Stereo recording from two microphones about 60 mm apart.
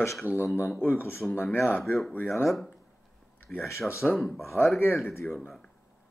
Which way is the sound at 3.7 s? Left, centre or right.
Left.